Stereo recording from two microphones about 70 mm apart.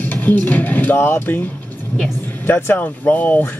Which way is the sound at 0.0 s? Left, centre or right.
Left.